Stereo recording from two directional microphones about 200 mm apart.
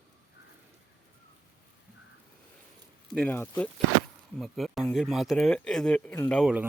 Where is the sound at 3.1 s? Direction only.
5° left (ahead or behind).